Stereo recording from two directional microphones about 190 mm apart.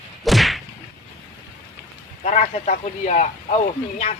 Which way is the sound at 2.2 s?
40° left (ahead or behind).